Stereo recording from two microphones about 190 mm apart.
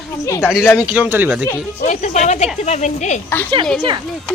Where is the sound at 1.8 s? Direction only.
40° left (ahead or behind).